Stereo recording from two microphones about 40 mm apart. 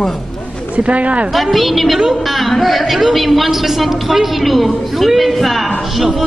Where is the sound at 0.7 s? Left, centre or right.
Right.